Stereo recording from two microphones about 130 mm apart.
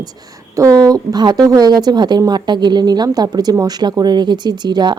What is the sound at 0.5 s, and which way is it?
A woman's voice, 25° right (ahead or behind).